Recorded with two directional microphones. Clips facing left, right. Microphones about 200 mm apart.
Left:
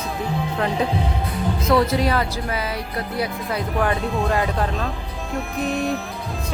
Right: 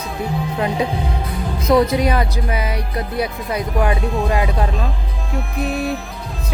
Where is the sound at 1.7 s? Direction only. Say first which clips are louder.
Right 4 dB; 20° right (ahead or behind).